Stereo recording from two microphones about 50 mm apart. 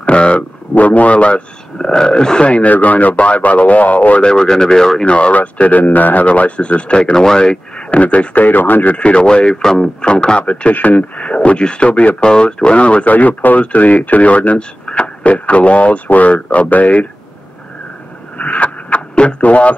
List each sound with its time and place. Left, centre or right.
0.0 s a man's voice: left
4.3 s speech: centre
5.1 s a man's voice: left
8.9 s a man's voice: left
18.4 s a sound: left